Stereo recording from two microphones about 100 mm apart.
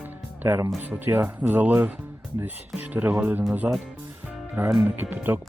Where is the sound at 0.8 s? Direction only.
20° right (ahead or behind).